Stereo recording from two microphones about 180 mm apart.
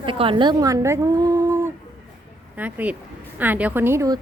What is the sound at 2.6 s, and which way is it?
A woman's voice, 10° right (ahead or behind).